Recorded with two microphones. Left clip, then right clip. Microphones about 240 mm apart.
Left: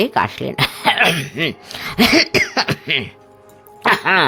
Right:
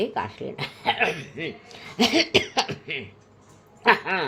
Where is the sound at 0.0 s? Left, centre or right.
Left.